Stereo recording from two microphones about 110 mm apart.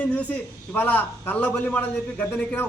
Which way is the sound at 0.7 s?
15° left (ahead or behind).